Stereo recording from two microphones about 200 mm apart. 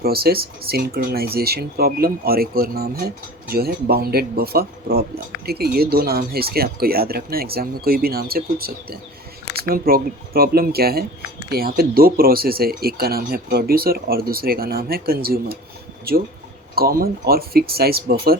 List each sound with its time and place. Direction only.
0.0 s speech: 50° right (ahead or behind)